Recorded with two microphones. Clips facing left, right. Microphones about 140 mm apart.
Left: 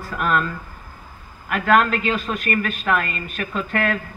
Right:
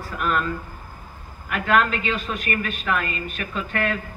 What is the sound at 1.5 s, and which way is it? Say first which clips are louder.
A man's voice: left 3 dB; 45° left (ahead or behind).